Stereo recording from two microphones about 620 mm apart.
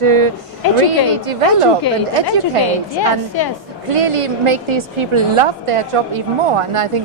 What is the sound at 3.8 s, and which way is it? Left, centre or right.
A woman's voice, right.